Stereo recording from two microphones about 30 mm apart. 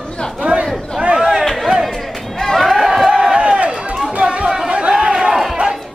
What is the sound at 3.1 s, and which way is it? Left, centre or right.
Crowd, right.